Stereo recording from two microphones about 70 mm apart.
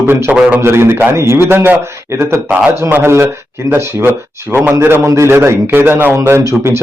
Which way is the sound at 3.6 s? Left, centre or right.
Right.